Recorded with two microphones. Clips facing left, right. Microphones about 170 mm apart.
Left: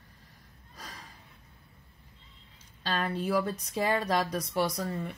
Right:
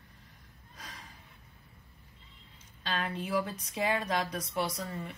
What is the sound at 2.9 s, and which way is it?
Speech, 40° left (ahead or behind).